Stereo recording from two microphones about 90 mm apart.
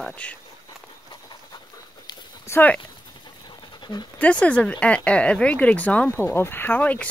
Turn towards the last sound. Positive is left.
turn(degrees=15)  # may be behind; listen again after turning